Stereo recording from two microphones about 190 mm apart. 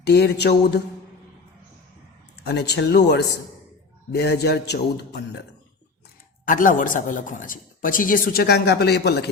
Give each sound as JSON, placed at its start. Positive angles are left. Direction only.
{"t": 0.0, "sound": "a man's voice", "side_deg": 60}
{"t": 2.4, "sound": "a man's voice", "side_deg": 60}
{"t": 6.4, "sound": "speech", "side_deg": 45}